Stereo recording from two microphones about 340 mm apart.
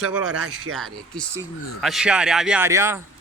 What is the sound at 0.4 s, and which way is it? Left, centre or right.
Speech, right.